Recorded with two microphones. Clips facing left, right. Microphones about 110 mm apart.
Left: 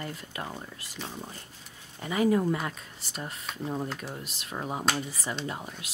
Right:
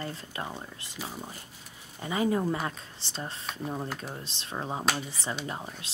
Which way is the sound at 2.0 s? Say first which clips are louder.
Left 2 dB; 25° right (ahead or behind).